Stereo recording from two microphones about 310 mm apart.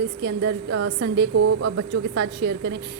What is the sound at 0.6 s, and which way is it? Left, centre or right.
A woman's voice, right.